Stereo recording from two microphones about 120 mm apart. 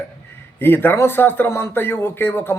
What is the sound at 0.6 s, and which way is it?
A man's voice, 15° left (ahead or behind).